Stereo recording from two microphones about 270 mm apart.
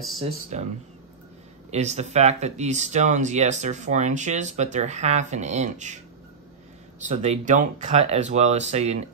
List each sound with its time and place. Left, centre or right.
0.5 s speech: right
7.1 s speech: right